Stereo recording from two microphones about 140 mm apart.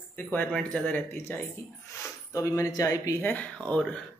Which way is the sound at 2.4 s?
20° left (ahead or behind).